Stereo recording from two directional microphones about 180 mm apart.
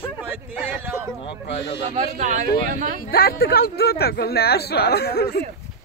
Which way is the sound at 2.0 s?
40° right (ahead or behind).